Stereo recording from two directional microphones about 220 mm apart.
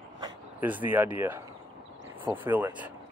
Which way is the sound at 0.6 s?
10° right (ahead or behind).